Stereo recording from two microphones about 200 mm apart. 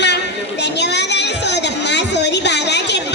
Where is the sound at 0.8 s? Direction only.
60° left (ahead or behind).